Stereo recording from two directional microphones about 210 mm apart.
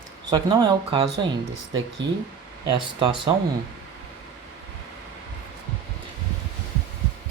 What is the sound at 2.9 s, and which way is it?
Speech, 25° right (ahead or behind).